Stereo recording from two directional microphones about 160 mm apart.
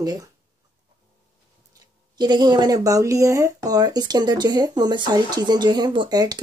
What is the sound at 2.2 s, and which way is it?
Speech, 25° right (ahead or behind).